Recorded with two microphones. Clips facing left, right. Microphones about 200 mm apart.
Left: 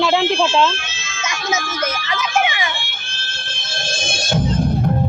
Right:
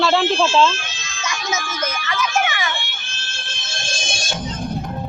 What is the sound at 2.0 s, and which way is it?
Music, 20° left (ahead or behind).